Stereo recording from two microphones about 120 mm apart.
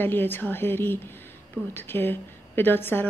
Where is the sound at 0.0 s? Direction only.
15° left (ahead or behind).